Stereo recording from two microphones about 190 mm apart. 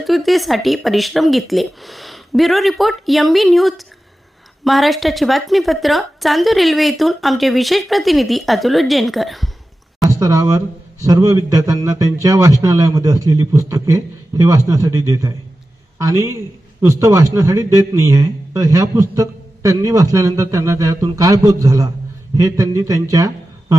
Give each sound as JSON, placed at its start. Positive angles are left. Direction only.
{"t": 0.0, "sound": "a woman's voice", "side_deg": 0}
{"t": 10.1, "sound": "a man's voice", "side_deg": -20}